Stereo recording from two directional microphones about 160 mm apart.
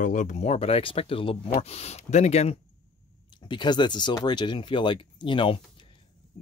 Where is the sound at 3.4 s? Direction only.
30° left (ahead or behind).